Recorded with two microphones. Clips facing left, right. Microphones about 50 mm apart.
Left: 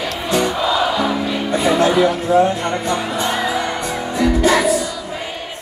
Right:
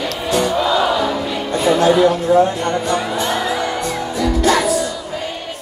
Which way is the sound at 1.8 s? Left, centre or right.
Centre.